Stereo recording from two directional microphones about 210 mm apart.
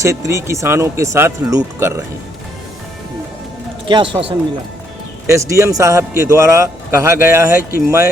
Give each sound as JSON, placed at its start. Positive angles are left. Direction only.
{"t": 0.0, "sound": "a man's voice", "side_deg": -15}
{"t": 3.8, "sound": "speech", "side_deg": -25}
{"t": 5.2, "sound": "a man's voice", "side_deg": -15}